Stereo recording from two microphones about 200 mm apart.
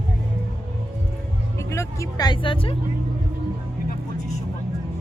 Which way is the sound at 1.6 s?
15° left (ahead or behind).